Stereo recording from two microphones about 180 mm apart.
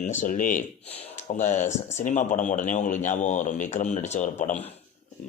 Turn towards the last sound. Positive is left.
turn(degrees=40)  # may be behind; listen again after turning